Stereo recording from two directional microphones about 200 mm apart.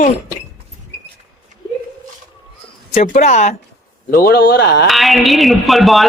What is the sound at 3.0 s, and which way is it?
Speech, 40° left (ahead or behind).